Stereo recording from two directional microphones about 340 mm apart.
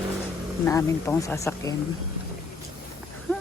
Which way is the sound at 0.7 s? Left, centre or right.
Centre.